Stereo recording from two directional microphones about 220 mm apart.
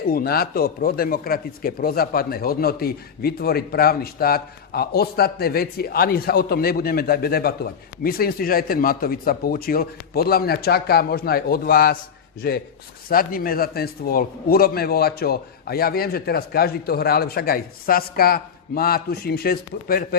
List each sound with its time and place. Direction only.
0.1 s speech: 45° left (ahead or behind)